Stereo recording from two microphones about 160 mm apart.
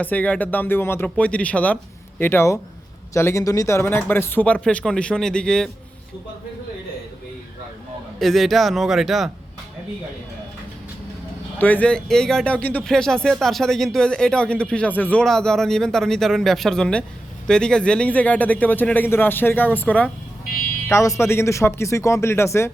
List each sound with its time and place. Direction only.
0.0 s speech: 10° left (ahead or behind)
8.2 s speech: centre (ahead or behind)
11.6 s speech: 10° left (ahead or behind)
20.5 s vehicle: 65° left (ahead or behind)
20.9 s speech: 20° left (ahead or behind)